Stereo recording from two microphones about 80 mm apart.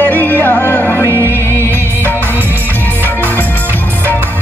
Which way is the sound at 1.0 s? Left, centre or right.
Right.